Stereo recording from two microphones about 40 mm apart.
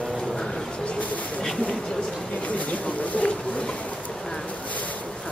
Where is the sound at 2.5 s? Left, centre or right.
Left.